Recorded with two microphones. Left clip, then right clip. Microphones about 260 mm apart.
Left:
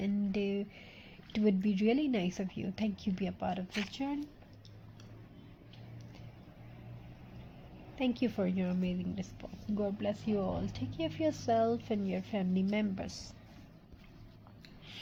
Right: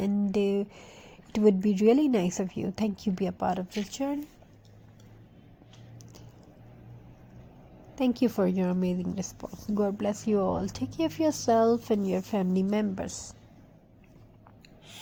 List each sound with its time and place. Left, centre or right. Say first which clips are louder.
0.0 s a sound: right 8 dB; right
2.6 s a woman's voice: right 7 dB; right
7.9 s a woman's voice: right 7 dB; right